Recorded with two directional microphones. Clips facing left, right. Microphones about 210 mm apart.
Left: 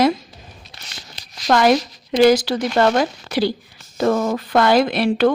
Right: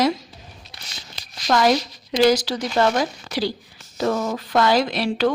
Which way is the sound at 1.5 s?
60° left (ahead or behind).